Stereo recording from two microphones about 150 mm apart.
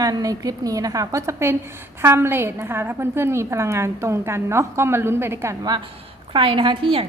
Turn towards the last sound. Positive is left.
turn(degrees=-35)  # may be behind; listen again after turning